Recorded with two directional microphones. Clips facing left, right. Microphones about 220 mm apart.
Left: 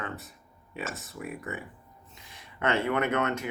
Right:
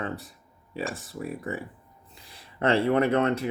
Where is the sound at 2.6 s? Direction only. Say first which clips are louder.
Right 5 dB; 30° right (ahead or behind).